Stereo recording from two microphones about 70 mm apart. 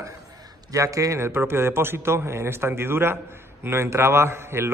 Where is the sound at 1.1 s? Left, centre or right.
Right.